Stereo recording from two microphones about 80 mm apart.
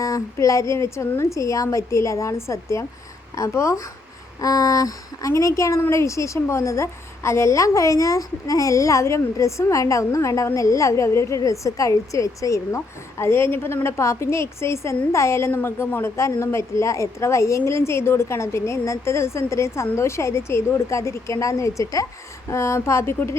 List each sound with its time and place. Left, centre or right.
0.0 s a woman's voice: left